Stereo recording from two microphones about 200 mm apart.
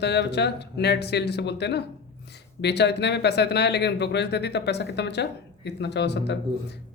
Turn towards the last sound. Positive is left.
turn(degrees=55)  # may be behind; listen again after turning